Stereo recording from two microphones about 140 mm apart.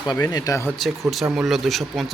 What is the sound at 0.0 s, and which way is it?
Speech, 30° left (ahead or behind).